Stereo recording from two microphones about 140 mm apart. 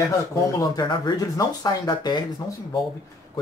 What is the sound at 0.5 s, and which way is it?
Speech, 25° left (ahead or behind).